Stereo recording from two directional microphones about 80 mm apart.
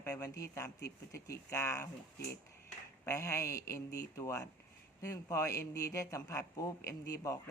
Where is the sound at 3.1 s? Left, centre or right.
Left.